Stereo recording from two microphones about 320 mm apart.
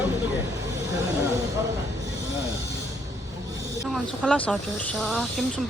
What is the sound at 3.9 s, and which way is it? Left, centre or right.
Speech, centre.